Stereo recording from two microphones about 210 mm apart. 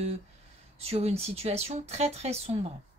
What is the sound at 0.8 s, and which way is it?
Speech, 30° right (ahead or behind).